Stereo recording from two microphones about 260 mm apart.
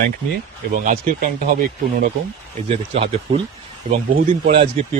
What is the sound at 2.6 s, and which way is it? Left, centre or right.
Speech, right.